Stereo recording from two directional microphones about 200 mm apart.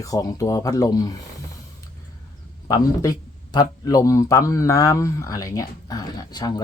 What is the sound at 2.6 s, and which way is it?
A man's voice, 15° left (ahead or behind).